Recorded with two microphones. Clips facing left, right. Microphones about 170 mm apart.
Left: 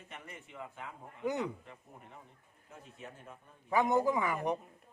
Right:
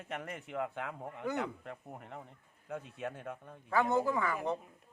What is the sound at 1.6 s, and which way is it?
A man's voice, 65° right (ahead or behind).